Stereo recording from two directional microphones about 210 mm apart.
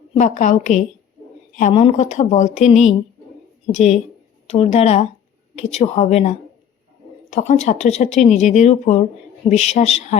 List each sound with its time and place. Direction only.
0.2 s speech: 35° left (ahead or behind)